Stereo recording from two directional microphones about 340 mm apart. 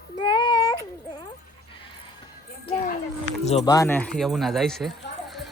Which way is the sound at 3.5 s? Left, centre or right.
Centre.